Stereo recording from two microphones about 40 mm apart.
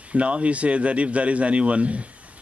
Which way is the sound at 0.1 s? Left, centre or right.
Right.